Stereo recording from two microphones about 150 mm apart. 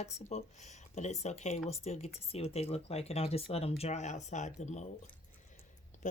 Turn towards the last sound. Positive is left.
turn(degrees=50)  # may be behind; listen again after turning